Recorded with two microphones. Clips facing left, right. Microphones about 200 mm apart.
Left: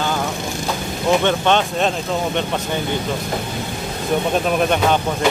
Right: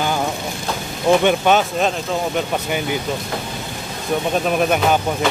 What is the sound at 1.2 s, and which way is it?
Speech, 10° right (ahead or behind).